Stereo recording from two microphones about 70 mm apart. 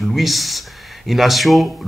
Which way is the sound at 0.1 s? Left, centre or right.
Centre.